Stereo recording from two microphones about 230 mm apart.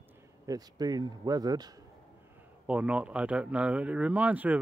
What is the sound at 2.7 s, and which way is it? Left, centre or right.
Speech, centre.